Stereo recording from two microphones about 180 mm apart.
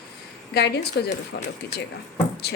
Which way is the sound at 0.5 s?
65° left (ahead or behind).